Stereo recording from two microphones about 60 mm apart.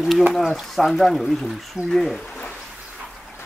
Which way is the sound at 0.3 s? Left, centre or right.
Centre.